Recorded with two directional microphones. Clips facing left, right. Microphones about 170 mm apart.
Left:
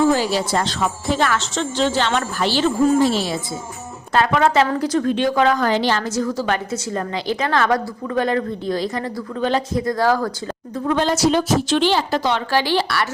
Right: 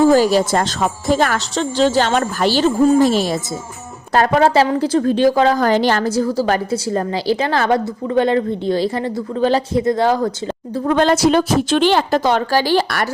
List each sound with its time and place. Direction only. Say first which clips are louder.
0.0 s a woman's voice: right 5 dB; 45° right (ahead or behind)
5.6 s speech: right 4 dB; 45° right (ahead or behind)
6.1 s a woman's voice: right 4 dB; 30° right (ahead or behind)
10.8 s speech: right 4 dB; 60° right (ahead or behind)